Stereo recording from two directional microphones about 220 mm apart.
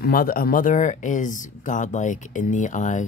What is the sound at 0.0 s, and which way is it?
Speech, 40° left (ahead or behind).